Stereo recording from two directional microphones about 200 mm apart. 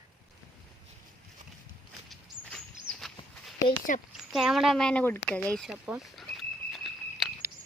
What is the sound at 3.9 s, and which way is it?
Speech, 40° left (ahead or behind).